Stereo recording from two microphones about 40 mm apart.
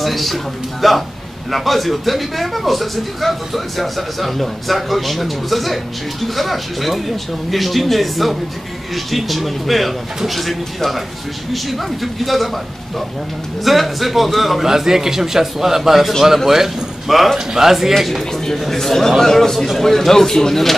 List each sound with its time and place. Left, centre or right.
0.0 s speech: centre
13.7 s a man's voice: centre
18.3 s a man's voice: centre